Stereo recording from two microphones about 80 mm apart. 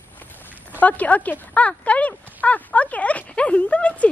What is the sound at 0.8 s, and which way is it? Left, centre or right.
Speech, centre.